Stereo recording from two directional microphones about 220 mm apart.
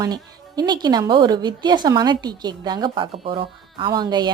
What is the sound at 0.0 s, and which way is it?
A woman's voice, 20° right (ahead or behind).